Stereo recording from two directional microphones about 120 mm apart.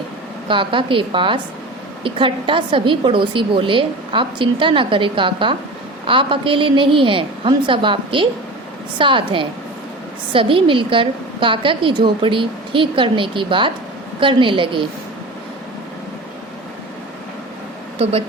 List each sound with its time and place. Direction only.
0.4 s a woman's voice: 45° right (ahead or behind)